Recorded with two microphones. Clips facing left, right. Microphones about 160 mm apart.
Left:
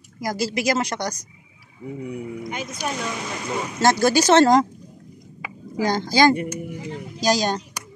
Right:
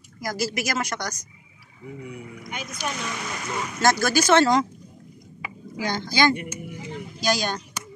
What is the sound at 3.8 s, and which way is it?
Speech, 30° left (ahead or behind).